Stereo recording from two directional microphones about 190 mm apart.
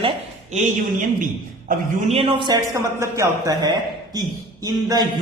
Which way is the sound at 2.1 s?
30° right (ahead or behind).